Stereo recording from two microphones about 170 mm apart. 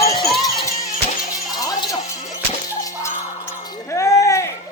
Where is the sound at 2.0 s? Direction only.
40° left (ahead or behind).